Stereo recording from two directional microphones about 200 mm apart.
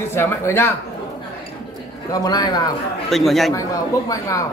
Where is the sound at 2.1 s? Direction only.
20° left (ahead or behind).